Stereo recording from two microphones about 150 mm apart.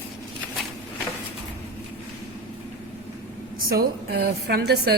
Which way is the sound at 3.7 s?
90° right.